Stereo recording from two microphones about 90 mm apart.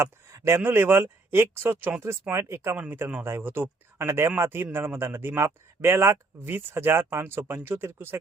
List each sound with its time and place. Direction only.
0.0 s speech: 30° right (ahead or behind)